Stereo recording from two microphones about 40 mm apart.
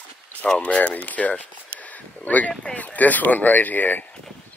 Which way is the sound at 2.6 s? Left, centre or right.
Left.